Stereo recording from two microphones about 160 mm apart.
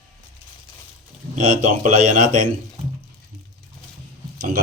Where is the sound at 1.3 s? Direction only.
50° right (ahead or behind).